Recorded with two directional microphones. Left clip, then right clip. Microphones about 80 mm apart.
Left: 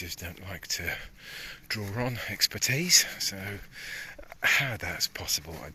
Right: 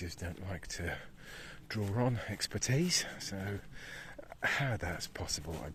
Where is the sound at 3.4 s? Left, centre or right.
Right.